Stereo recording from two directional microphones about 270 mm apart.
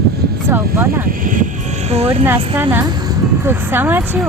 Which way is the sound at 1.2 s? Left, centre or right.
Right.